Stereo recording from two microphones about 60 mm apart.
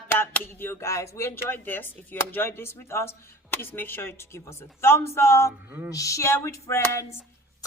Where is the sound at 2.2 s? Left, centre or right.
Left.